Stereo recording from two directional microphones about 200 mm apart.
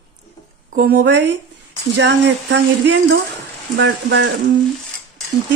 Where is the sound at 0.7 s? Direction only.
50° right (ahead or behind).